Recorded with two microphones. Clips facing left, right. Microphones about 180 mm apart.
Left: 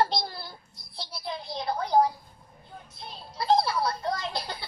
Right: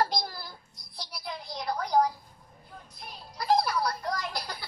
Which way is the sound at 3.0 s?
25° left (ahead or behind).